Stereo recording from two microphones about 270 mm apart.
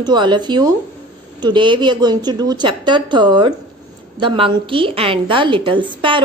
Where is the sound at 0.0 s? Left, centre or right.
Centre.